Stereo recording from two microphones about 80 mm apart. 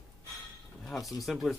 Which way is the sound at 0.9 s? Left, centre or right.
Centre.